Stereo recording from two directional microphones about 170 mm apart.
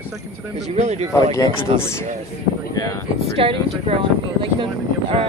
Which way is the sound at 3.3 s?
35° right (ahead or behind).